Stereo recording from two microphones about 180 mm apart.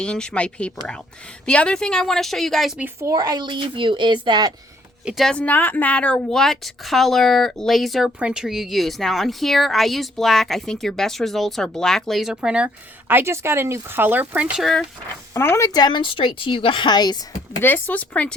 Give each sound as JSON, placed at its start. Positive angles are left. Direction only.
{"t": 0.0, "sound": "speech", "side_deg": 5}
{"t": 3.1, "sound": "a child's voice", "side_deg": -20}
{"t": 5.0, "sound": "speech", "side_deg": 0}
{"t": 15.3, "sound": "a woman's voice", "side_deg": 15}